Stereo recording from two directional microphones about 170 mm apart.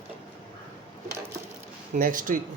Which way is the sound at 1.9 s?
50° right (ahead or behind).